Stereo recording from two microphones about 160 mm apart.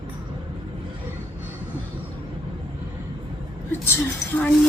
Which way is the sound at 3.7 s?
15° left (ahead or behind).